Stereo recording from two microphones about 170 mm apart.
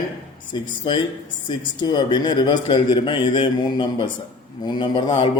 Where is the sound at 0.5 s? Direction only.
25° left (ahead or behind).